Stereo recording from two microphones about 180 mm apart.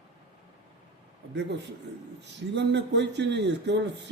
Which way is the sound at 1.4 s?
75° right (ahead or behind).